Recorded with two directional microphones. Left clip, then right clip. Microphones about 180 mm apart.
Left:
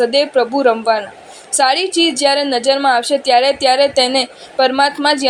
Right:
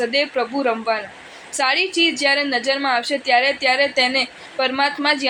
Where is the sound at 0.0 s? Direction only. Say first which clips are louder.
Left 7 dB; 25° left (ahead or behind).